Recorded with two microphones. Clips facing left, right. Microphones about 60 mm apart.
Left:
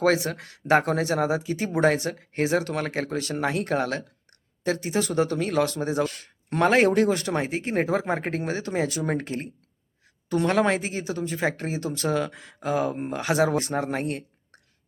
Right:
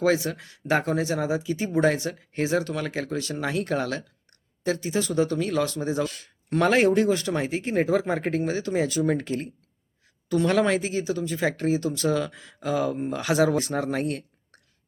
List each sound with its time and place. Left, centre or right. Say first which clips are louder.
0.0 s speech: left 1 dB; left
8.4 s speech: right 2 dB; left